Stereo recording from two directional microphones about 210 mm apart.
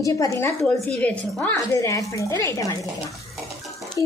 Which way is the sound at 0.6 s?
Centre (ahead or behind).